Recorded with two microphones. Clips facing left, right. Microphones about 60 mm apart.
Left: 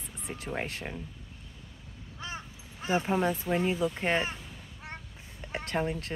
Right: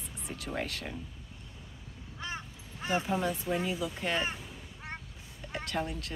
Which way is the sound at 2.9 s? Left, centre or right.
Left.